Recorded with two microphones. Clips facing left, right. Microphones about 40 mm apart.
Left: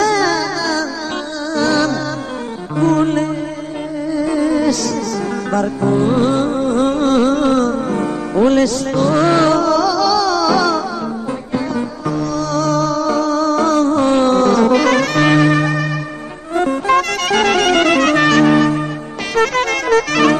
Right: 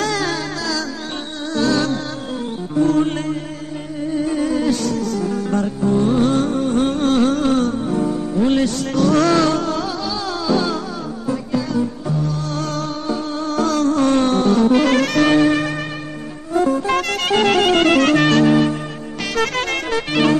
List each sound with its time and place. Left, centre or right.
0.0 s music: left
4.1 s music: left
9.1 s music: left
9.5 s music: left
12.1 s music: left
16.5 s music: left
20.1 s music: left